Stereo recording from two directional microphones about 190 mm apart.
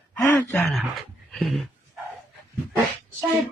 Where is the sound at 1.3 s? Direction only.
Centre (ahead or behind).